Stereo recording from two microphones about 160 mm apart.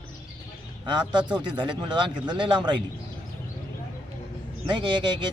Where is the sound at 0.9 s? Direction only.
30° right (ahead or behind).